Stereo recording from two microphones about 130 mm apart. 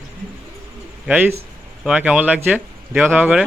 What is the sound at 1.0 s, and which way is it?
Speech, 15° right (ahead or behind).